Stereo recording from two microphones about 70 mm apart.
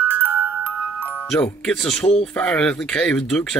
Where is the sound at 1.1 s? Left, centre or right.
Centre.